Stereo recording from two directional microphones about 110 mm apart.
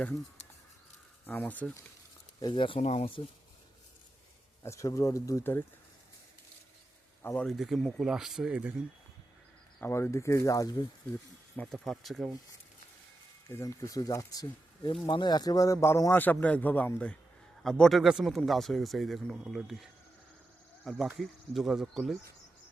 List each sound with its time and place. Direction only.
1.3 s a man's voice: 15° left (ahead or behind)
2.4 s speech: 45° left (ahead or behind)
2.8 s speech: 75° left (ahead or behind)
4.6 s speech: 30° left (ahead or behind)
7.2 s speech: 20° left (ahead or behind)
7.4 s speech: centre (ahead or behind)
9.8 s speech: 25° left (ahead or behind)
11.5 s speech: 5° left (ahead or behind)
13.5 s speech: 25° left (ahead or behind)
15.0 s a man's voice: 45° left (ahead or behind); by 22.2 s centre (ahead or behind)